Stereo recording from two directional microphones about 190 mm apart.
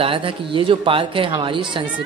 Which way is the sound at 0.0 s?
30° right (ahead or behind).